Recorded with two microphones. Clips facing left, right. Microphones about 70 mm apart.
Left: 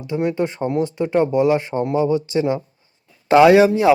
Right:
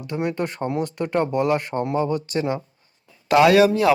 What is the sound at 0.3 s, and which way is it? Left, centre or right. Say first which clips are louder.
Speech: left 4 dB; centre.